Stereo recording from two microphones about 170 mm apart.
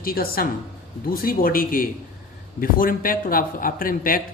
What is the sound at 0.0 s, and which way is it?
A man's voice, 60° left (ahead or behind).